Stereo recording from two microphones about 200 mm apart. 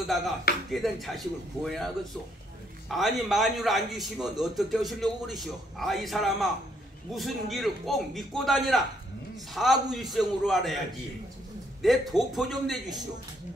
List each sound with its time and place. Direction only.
0.7 s a man's voice: centre (ahead or behind)
2.9 s a man's voice: centre (ahead or behind)
11.8 s a man's voice: centre (ahead or behind)